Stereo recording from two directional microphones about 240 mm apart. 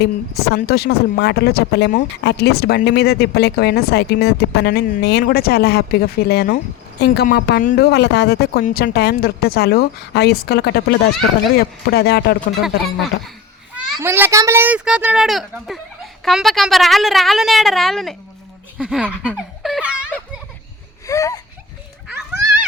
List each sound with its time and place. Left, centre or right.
0.0 s speech: left
13.7 s a child's voice: centre
21.1 s a sound: centre